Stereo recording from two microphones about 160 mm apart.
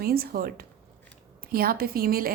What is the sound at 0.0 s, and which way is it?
Speech, 70° right (ahead or behind).